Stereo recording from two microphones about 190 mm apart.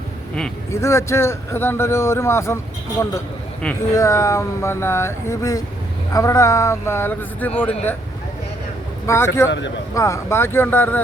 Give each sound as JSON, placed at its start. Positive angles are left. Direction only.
{"t": 0.7, "sound": "a man's voice", "side_deg": 15}
{"t": 3.9, "sound": "a man's voice", "side_deg": 15}
{"t": 9.0, "sound": "a man's voice", "side_deg": 15}
{"t": 9.5, "sound": "speech", "side_deg": 70}
{"t": 9.9, "sound": "a man's voice", "side_deg": 15}